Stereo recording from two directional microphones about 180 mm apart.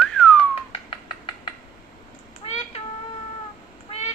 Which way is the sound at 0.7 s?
30° left (ahead or behind).